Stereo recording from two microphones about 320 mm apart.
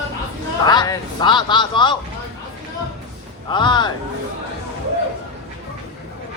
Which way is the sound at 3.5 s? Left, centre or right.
Centre.